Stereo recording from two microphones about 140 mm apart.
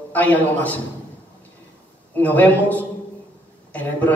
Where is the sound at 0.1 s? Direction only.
10° left (ahead or behind).